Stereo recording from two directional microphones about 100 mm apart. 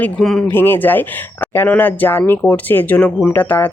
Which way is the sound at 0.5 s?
20° left (ahead or behind).